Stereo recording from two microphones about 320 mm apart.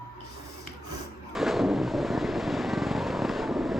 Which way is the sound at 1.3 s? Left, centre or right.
Centre.